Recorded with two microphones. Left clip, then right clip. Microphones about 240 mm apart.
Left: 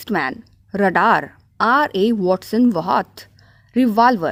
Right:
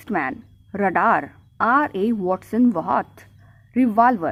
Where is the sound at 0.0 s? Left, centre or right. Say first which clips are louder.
Left 3 dB; left.